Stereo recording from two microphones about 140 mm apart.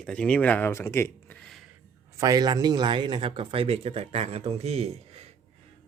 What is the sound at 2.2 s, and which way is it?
Speech, 25° right (ahead or behind).